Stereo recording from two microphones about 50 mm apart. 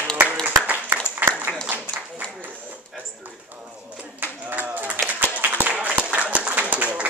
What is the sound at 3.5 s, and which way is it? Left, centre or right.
Speech, right.